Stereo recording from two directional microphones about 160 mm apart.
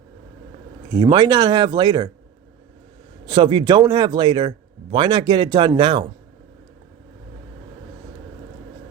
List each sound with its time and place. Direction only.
0.9 s speech: 25° right (ahead or behind)
3.2 s speech: 30° right (ahead or behind)